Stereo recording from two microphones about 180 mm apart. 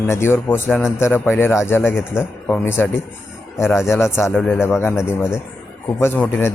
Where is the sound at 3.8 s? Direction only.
15° left (ahead or behind).